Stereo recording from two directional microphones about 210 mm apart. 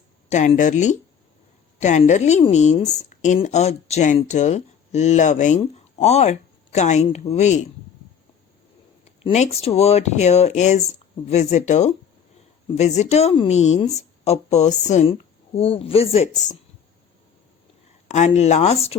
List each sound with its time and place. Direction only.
0.3 s a woman's voice: 35° left (ahead or behind)
9.0 s a woman's voice: 30° left (ahead or behind)
18.1 s a woman's voice: 35° left (ahead or behind)